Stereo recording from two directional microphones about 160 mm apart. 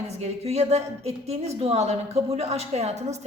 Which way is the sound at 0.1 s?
40° right (ahead or behind).